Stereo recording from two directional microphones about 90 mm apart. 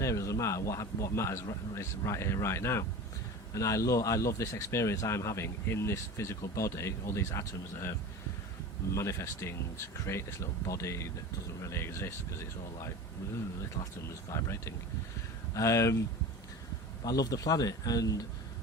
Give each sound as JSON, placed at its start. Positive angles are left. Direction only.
{"t": 0.0, "sound": "speech", "side_deg": 35}
{"t": 9.0, "sound": "speech", "side_deg": 35}
{"t": 14.3, "sound": "speech", "side_deg": 30}
{"t": 17.0, "sound": "a man's voice", "side_deg": 45}